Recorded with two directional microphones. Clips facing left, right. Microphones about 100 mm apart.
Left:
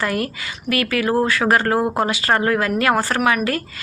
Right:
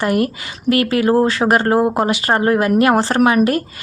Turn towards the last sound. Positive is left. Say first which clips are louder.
# right 5 dB
turn(degrees=-25)  # may be behind; listen again after turning